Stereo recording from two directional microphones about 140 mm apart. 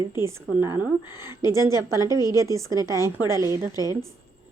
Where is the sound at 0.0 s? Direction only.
20° right (ahead or behind).